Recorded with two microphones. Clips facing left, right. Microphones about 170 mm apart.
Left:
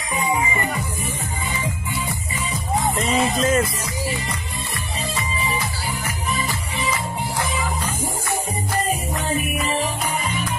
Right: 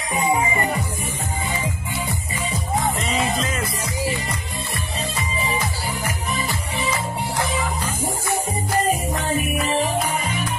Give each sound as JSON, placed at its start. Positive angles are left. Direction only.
{"t": 3.1, "sound": "music", "side_deg": 45}